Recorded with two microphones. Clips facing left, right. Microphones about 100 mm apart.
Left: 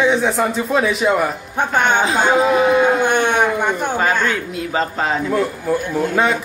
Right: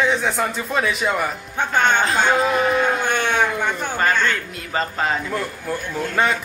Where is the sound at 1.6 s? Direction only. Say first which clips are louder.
Left 2 dB; 15° left (ahead or behind).